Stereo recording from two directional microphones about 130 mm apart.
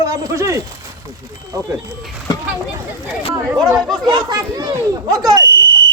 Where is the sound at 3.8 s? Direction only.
5° left (ahead or behind).